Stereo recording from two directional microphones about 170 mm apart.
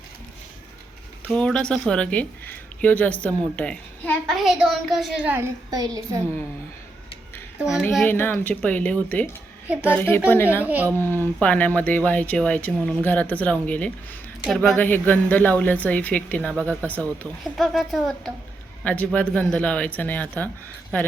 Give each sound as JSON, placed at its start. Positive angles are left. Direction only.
{"t": 1.3, "sound": "a woman's voice", "side_deg": 5}
{"t": 5.7, "sound": "a woman's voice", "side_deg": -20}
{"t": 7.6, "sound": "a woman's voice", "side_deg": -5}
{"t": 8.0, "sound": "a woman's voice", "side_deg": 10}
{"t": 10.6, "sound": "speech", "side_deg": -10}
{"t": 10.9, "sound": "a woman's voice", "side_deg": 15}